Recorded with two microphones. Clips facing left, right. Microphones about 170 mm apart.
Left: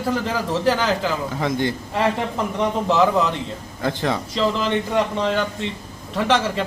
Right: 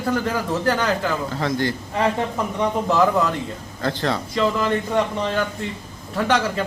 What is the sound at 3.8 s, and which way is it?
Speech, 15° left (ahead or behind).